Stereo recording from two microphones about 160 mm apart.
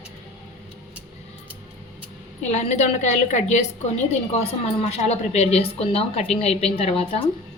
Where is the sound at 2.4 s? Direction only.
45° left (ahead or behind).